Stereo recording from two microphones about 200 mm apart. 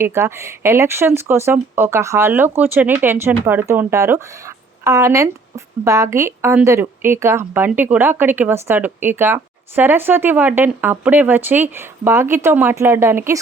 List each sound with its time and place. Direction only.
0.0 s speech: 10° right (ahead or behind)